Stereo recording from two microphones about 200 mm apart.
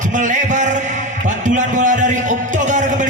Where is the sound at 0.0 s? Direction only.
40° right (ahead or behind).